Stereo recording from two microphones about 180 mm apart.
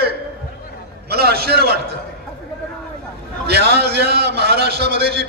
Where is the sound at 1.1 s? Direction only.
60° right (ahead or behind).